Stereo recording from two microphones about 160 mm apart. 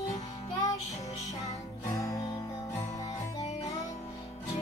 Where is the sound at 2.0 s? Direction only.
20° left (ahead or behind).